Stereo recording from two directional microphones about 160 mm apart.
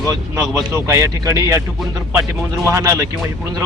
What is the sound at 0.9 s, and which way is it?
Speech, 15° right (ahead or behind).